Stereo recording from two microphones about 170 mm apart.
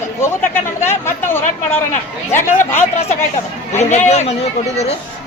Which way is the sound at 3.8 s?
40° left (ahead or behind).